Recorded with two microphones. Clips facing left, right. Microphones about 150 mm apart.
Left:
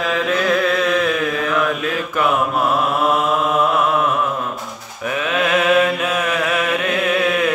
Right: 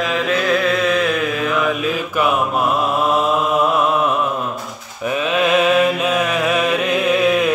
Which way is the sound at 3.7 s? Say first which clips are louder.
Right 1 dB; 20° right (ahead or behind).